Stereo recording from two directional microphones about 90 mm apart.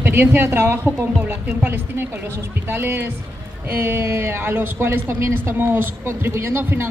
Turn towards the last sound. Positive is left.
turn(degrees=-30)  # may be behind; listen again after turning